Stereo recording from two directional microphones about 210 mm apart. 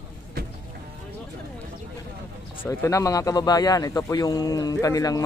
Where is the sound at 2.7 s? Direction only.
15° left (ahead or behind).